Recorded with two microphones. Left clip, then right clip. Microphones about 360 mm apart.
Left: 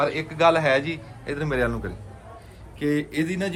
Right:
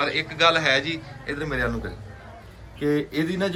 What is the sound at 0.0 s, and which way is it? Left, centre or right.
A man's voice, centre.